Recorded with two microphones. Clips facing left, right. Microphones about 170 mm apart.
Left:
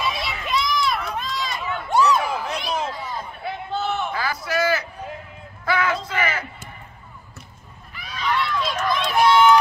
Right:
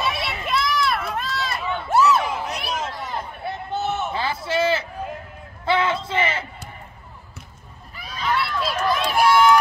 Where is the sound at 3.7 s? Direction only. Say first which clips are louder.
Even; 20° right (ahead or behind).